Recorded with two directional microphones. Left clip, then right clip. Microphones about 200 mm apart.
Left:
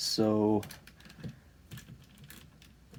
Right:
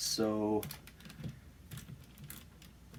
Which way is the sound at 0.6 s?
5° left (ahead or behind).